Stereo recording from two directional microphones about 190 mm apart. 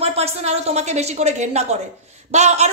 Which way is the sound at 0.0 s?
35° right (ahead or behind).